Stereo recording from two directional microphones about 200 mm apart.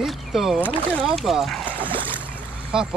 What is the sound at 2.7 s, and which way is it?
Speech, 5° right (ahead or behind).